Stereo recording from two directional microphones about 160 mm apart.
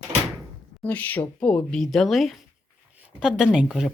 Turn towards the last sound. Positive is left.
turn(degrees=0)  # may be behind; listen again after turning